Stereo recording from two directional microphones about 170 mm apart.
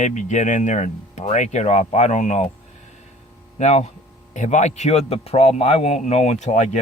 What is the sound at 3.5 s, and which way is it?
Speech, 45° left (ahead or behind).